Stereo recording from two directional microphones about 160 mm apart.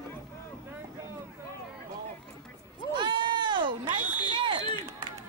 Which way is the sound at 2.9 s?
30° right (ahead or behind).